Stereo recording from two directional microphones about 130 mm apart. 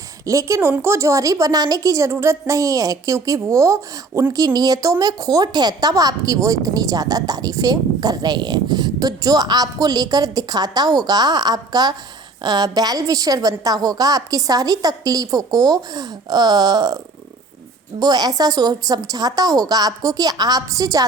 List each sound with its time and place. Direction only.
0.3 s a woman's voice: 25° right (ahead or behind)
18.0 s a woman's voice: 30° right (ahead or behind)